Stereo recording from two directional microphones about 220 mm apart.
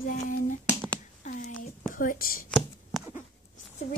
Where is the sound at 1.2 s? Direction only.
35° left (ahead or behind).